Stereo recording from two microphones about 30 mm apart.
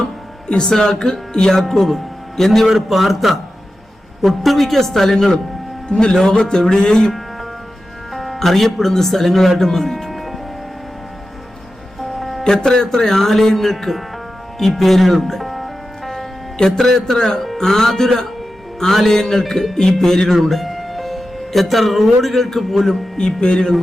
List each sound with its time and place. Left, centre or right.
0.6 s music: left
1.7 s speech: centre
2.7 s a man's voice: centre
5.9 s music: left
8.1 s speech: centre
10.1 s music: centre
11.9 s music: centre
12.6 s speech: centre
14.6 s music: centre
16.7 s speech: centre
23.1 s music: left